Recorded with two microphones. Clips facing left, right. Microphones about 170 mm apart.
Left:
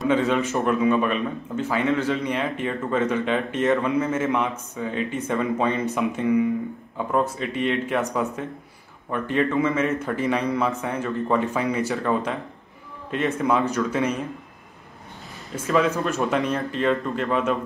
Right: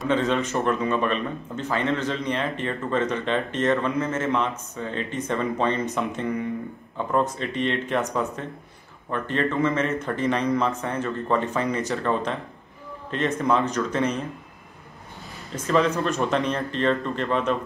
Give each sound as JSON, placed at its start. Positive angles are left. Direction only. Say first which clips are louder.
{"t": 0.0, "sound": "a man's voice", "louder": "left 2 dB", "side_deg": 10}
{"t": 13.4, "sound": "a man's voice", "louder": "left 1 dB", "side_deg": 10}
{"t": 15.5, "sound": "a man's voice", "louder": "even", "side_deg": 5}